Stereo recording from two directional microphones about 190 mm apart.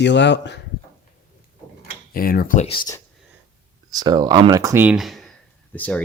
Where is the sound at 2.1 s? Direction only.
50° left (ahead or behind); by 3.0 s 25° left (ahead or behind).